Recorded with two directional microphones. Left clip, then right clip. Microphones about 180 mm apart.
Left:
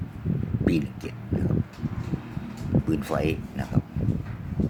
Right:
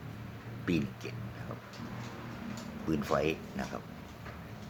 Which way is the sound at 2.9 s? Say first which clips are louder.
Left 2 dB; 15° left (ahead or behind).